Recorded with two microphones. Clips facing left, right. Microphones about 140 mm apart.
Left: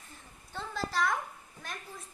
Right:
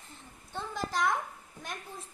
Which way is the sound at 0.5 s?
20° right (ahead or behind).